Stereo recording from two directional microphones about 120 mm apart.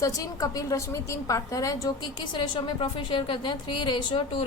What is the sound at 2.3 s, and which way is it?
A woman's voice, 40° left (ahead or behind).